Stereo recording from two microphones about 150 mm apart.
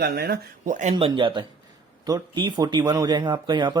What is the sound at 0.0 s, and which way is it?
Speech, 90° right.